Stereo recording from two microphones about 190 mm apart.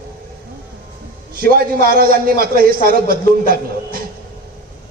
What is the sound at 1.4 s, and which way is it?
A man's voice, 50° right (ahead or behind).